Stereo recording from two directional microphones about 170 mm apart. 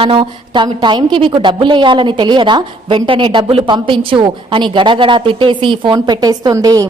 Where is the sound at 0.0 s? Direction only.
30° right (ahead or behind).